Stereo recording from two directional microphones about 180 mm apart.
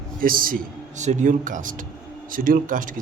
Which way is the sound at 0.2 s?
50° right (ahead or behind).